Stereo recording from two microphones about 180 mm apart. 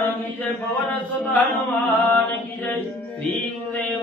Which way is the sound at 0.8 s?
10° left (ahead or behind).